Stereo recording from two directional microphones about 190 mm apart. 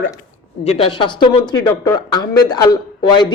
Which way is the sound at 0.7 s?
30° left (ahead or behind).